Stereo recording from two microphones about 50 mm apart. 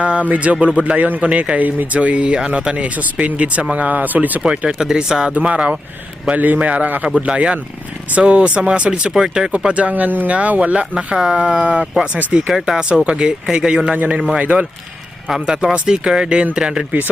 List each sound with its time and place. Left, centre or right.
0.0 s speech: right
4.4 s speech: right
4.8 s speech: centre
5.3 s a man's voice: right
8.9 s speech: centre
9.5 s speech: right
12.5 s speech: centre
13.9 s speech: right
14.4 s a man's voice: right
15.3 s speech: centre